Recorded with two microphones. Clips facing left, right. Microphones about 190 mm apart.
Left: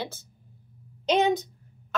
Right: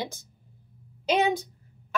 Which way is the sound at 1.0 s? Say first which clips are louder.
Left 2 dB; 10° right (ahead or behind).